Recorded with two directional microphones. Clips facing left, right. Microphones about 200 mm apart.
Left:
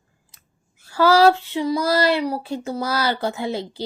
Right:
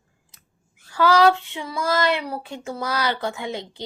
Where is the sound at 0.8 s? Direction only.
40° left (ahead or behind).